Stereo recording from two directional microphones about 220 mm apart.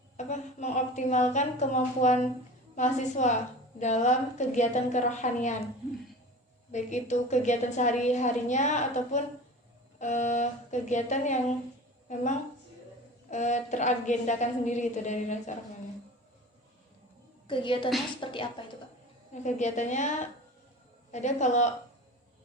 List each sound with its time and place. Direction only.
0.2 s a woman's voice: 30° left (ahead or behind)
6.7 s a woman's voice: 30° left (ahead or behind)
17.5 s a woman's voice: 20° left (ahead or behind)
19.3 s a woman's voice: 30° left (ahead or behind)
21.1 s a woman's voice: 30° left (ahead or behind)